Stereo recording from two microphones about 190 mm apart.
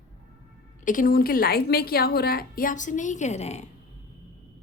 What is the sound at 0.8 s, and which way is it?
A woman's voice, 45° left (ahead or behind).